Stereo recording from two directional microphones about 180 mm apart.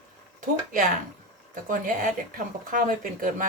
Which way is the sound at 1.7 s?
50° right (ahead or behind).